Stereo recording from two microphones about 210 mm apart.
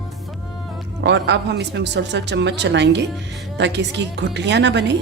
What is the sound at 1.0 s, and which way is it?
Speech, 55° right (ahead or behind).